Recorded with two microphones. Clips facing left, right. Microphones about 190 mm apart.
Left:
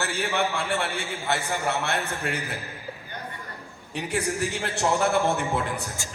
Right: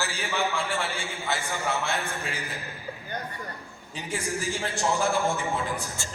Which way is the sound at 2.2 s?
60° left (ahead or behind).